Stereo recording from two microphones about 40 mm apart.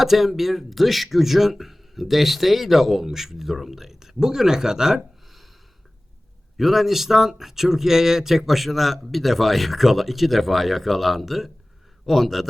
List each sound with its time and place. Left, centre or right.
0.0 s speech: centre
6.6 s speech: centre